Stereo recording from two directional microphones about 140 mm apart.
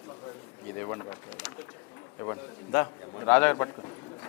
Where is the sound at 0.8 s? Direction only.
20° left (ahead or behind).